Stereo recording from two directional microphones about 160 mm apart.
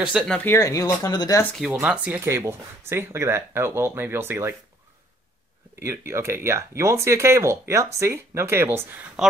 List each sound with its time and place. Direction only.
0.0 s speech: centre (ahead or behind)
0.6 s speech: 20° left (ahead or behind)
1.4 s speech: 5° left (ahead or behind)
1.7 s speech: 10° right (ahead or behind)
5.9 s speech: 15° right (ahead or behind)